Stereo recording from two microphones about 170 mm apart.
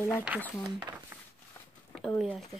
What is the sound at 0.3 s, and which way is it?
Speech, 10° right (ahead or behind).